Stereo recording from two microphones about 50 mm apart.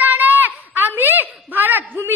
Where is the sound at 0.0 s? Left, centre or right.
Right.